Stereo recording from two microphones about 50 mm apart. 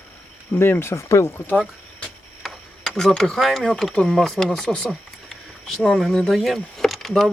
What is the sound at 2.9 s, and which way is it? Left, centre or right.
Speech, centre.